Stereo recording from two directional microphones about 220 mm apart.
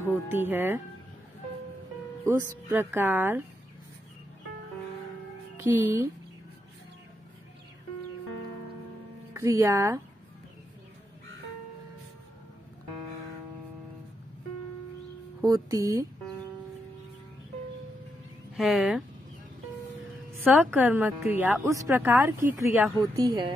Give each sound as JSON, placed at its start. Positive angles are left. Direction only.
{"t": 0.3, "sound": "a woman's voice", "side_deg": -10}
{"t": 2.7, "sound": "a woman's voice", "side_deg": -10}
{"t": 5.6, "sound": "a woman's voice", "side_deg": -10}
{"t": 9.3, "sound": "a woman's voice", "side_deg": -15}
{"t": 15.4, "sound": "a woman's voice", "side_deg": -15}
{"t": 18.6, "sound": "speech", "side_deg": 0}
{"t": 20.2, "sound": "a woman's voice", "side_deg": -10}